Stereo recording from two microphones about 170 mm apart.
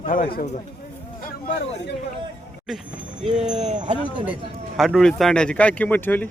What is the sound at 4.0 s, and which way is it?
Speech, 30° right (ahead or behind).